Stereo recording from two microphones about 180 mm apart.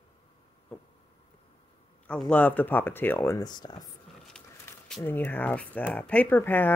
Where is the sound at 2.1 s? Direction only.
10° left (ahead or behind); by 3.8 s 25° left (ahead or behind).